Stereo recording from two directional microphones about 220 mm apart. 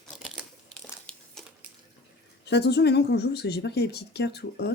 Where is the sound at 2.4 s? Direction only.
50° left (ahead or behind).